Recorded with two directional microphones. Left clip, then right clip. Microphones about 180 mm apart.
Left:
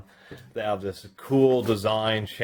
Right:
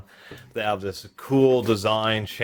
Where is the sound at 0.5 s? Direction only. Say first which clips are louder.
Right 2 dB; 30° right (ahead or behind).